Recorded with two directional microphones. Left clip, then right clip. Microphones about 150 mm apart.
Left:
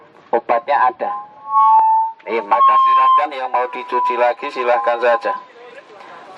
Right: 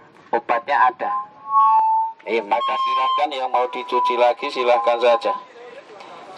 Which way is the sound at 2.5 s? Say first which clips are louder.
Left 11 dB; 25° right (ahead or behind).